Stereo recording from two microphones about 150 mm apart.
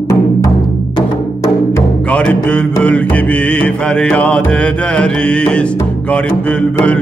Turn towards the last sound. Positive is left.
turn(degrees=10)  # may be behind; listen again after turning